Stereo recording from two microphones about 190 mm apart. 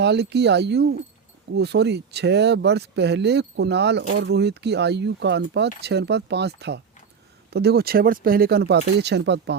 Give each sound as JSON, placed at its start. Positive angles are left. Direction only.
{"t": 0.0, "sound": "speech", "side_deg": -60}